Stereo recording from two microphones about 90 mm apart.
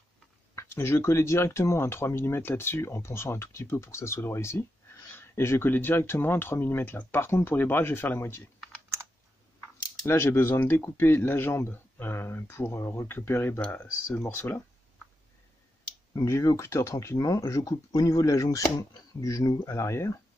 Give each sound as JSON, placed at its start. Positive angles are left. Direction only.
{"t": 0.6, "sound": "speech", "side_deg": 30}
{"t": 10.0, "sound": "speech", "side_deg": 30}
{"t": 13.8, "sound": "speech", "side_deg": 25}
{"t": 16.3, "sound": "speech", "side_deg": 35}